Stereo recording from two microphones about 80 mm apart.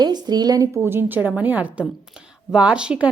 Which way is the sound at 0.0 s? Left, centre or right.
Right.